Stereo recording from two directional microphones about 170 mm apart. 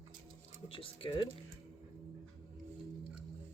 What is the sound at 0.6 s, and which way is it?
Speech, 30° left (ahead or behind).